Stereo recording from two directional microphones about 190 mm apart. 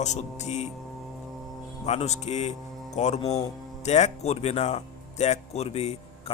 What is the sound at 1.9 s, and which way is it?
Speech, 35° left (ahead or behind).